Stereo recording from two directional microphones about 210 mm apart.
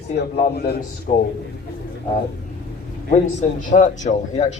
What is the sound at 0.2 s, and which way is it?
Speech, 50° left (ahead or behind).